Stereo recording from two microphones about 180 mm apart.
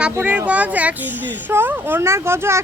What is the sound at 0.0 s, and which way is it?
Speech, 5° right (ahead or behind).